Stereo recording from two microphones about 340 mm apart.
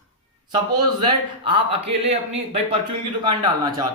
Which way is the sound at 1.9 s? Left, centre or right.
Centre.